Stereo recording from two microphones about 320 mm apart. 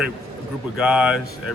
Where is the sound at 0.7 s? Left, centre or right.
Centre.